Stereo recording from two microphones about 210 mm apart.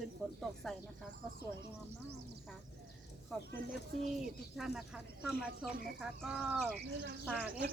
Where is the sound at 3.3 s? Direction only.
5° left (ahead or behind).